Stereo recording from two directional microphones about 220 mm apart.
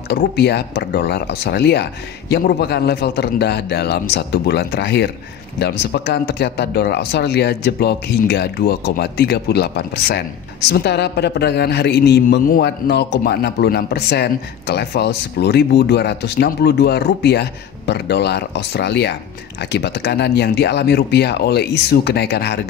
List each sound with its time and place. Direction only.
0.1 s a man's voice: 50° left (ahead or behind)